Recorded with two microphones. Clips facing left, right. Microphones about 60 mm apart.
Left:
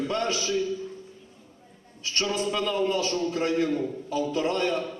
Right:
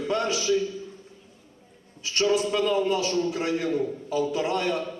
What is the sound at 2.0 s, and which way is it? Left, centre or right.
A man's voice, centre.